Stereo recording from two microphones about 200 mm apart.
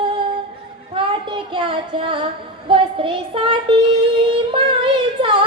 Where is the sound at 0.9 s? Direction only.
25° right (ahead or behind).